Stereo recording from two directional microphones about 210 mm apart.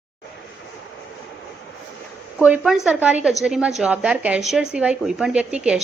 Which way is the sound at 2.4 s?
5° right (ahead or behind).